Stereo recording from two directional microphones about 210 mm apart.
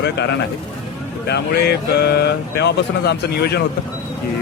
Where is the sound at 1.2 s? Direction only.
50° left (ahead or behind).